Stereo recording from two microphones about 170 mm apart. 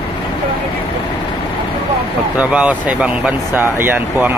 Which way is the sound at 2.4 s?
10° right (ahead or behind).